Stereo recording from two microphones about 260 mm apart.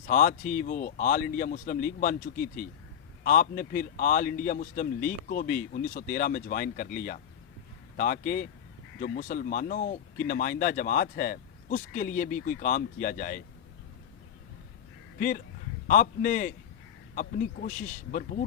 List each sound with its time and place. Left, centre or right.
0.0 s speech: left
15.9 s speech: left